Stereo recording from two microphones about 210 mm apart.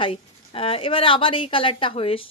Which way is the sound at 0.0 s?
25° left (ahead or behind).